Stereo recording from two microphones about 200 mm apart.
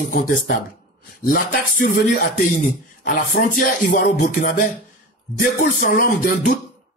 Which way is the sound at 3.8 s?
40° left (ahead or behind).